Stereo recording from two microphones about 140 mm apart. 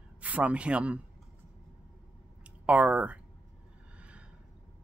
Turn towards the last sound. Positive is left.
turn(degrees=-10)  # may be behind; listen again after turning